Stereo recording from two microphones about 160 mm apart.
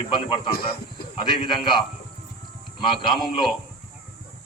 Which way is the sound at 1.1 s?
30° left (ahead or behind).